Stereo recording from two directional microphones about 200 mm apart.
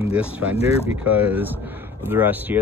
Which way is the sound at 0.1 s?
5° right (ahead or behind).